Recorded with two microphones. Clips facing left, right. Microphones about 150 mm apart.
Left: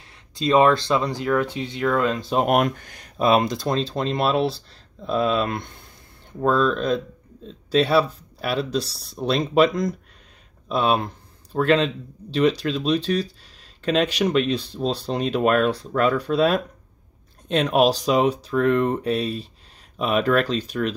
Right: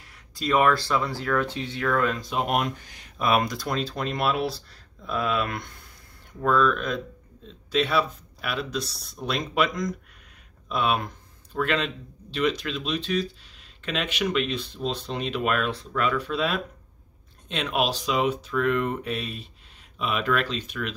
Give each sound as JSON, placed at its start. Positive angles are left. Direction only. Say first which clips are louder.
{"t": 0.3, "sound": "speech", "louder": "left 5 dB", "side_deg": 25}
{"t": 2.4, "sound": "speech", "louder": "left 6 dB", "side_deg": 55}
{"t": 3.2, "sound": "speech", "louder": "left 5 dB", "side_deg": 25}